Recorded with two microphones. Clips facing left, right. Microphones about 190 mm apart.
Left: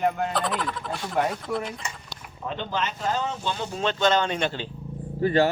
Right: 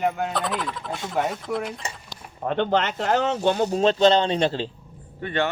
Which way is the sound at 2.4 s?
60° right (ahead or behind).